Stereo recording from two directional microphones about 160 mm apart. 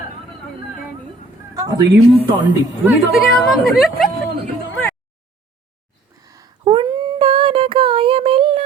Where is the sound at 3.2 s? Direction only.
5° left (ahead or behind).